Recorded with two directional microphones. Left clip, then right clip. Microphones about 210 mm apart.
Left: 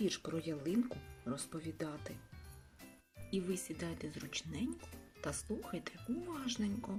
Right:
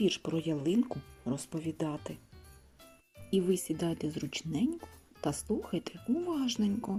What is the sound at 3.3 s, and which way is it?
Speech, 20° right (ahead or behind).